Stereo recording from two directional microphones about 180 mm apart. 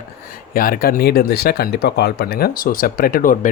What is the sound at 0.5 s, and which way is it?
Speech, 55° left (ahead or behind).